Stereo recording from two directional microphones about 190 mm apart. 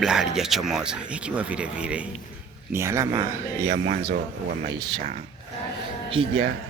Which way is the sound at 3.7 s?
50° right (ahead or behind).